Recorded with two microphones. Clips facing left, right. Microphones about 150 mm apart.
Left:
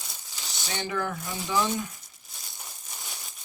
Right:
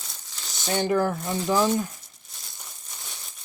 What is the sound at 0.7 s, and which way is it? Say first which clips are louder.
Speech: right 8 dB; 45° right (ahead or behind).